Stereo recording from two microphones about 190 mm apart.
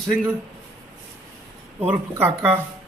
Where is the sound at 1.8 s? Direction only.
10° right (ahead or behind).